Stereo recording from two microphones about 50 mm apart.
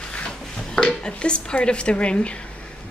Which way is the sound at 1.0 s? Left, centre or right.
Centre.